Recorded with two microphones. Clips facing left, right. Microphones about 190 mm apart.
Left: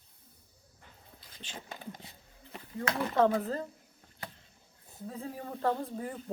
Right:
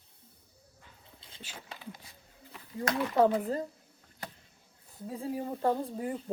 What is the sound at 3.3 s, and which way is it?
Speech, 15° right (ahead or behind).